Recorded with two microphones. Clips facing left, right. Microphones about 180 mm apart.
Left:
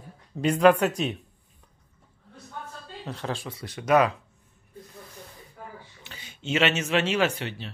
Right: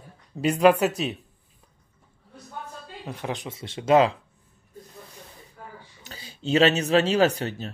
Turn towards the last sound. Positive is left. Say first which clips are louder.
# right 4 dB
turn(degrees=-40)  # may be behind; listen again after turning